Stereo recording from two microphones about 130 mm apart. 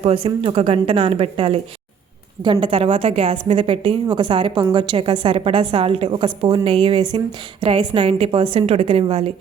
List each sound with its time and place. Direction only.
0.0 s a woman's voice: 45° right (ahead or behind)